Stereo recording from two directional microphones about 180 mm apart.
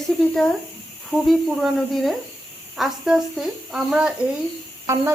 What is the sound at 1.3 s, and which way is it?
Speech, centre (ahead or behind).